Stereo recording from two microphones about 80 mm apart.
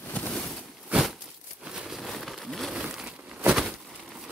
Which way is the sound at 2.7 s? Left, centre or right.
Centre.